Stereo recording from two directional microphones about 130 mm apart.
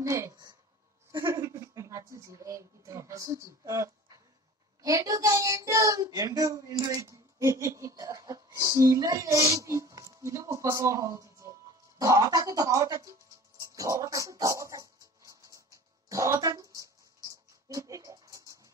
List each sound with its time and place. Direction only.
0.0 s a woman's voice: 20° right (ahead or behind)
13.6 s dog: 25° right (ahead or behind)
16.1 s a sound: 25° right (ahead or behind)